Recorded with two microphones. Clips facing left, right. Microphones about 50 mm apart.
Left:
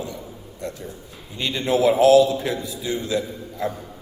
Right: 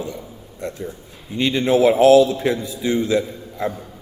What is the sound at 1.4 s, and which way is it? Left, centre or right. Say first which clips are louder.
A man's voice: right 4 dB; right.